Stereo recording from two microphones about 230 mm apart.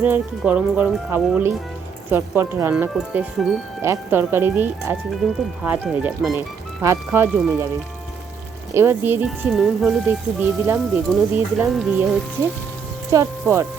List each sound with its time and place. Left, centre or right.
0.0 s speech: centre
8.7 s speech: centre
13.1 s speech: centre